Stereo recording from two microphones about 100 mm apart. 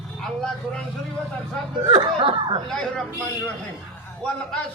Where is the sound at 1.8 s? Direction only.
65° right (ahead or behind).